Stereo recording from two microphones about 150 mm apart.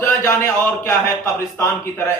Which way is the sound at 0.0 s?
20° left (ahead or behind).